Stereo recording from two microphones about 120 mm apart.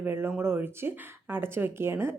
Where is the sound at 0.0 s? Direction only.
20° right (ahead or behind).